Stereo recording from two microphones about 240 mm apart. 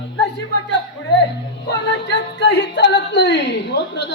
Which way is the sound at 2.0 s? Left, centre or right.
Left.